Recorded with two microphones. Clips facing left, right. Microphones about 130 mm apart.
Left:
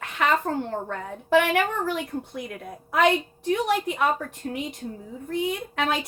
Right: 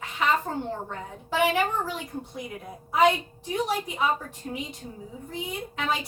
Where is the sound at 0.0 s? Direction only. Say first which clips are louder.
Left 2 dB; 60° left (ahead or behind).